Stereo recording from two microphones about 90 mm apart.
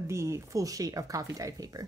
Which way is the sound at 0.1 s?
35° right (ahead or behind).